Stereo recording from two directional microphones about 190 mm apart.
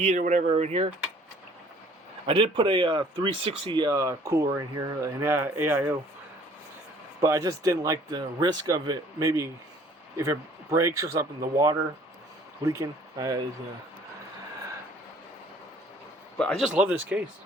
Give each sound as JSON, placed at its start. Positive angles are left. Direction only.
{"t": 0.0, "sound": "speech", "side_deg": -40}
{"t": 2.2, "sound": "speech", "side_deg": -25}
{"t": 7.2, "sound": "speech", "side_deg": -15}
{"t": 16.4, "sound": "speech", "side_deg": 0}